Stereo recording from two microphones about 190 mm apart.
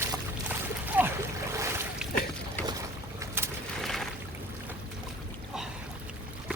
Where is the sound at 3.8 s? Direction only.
Centre (ahead or behind).